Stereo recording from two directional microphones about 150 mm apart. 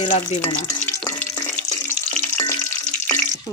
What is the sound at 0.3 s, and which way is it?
Stir, 45° left (ahead or behind).